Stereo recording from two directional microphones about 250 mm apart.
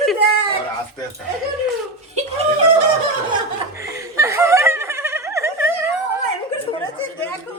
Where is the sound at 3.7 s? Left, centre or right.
Centre.